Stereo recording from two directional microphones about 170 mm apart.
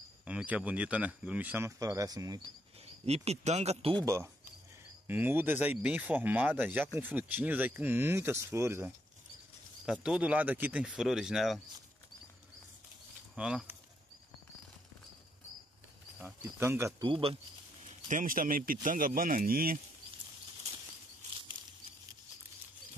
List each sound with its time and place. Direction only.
0.2 s speech: 5° right (ahead or behind)
3.1 s speech: 40° right (ahead or behind)
4.0 s speech: 20° right (ahead or behind)
10.0 s speech: 5° right (ahead or behind)
13.3 s speech: 5° right (ahead or behind)
16.2 s speech: 10° right (ahead or behind)
17.1 s speech: 30° right (ahead or behind)
17.8 s a man's voice: 50° right (ahead or behind)